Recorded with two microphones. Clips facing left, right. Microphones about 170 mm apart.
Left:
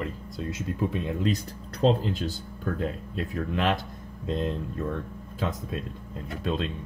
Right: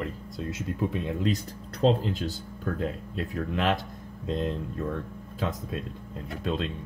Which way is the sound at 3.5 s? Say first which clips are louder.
Even; 45° right (ahead or behind).